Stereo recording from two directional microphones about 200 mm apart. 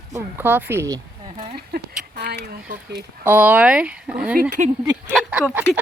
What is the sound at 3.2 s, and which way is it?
Speech, 10° right (ahead or behind).